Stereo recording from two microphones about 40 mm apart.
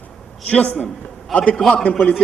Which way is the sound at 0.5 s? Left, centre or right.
Left.